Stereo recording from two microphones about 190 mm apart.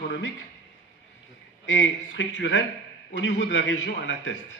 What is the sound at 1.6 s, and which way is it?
A man's voice, 85° left.